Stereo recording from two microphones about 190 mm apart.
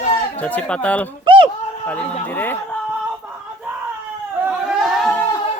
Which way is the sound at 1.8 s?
10° left (ahead or behind).